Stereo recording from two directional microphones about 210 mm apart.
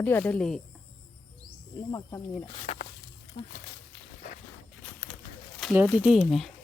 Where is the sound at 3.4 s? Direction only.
35° left (ahead or behind).